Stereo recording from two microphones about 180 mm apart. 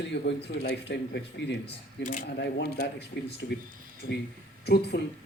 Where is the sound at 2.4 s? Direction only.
65° left (ahead or behind).